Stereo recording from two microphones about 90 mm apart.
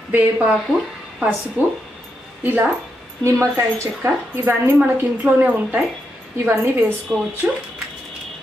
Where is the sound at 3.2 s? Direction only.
35° right (ahead or behind).